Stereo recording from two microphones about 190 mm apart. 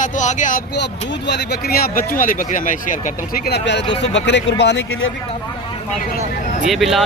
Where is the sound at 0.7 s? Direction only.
65° left (ahead or behind).